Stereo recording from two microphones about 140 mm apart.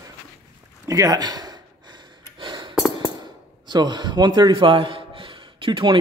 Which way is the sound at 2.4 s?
35° right (ahead or behind).